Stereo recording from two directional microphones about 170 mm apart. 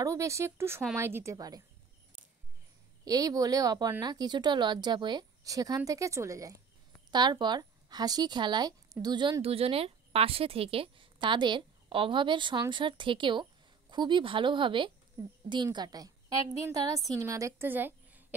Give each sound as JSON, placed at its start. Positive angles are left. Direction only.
{"t": 0.0, "sound": "speech", "side_deg": -15}
{"t": 3.1, "sound": "a woman's voice", "side_deg": -20}